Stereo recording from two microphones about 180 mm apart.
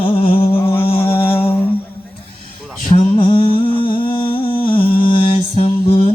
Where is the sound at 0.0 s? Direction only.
30° left (ahead or behind).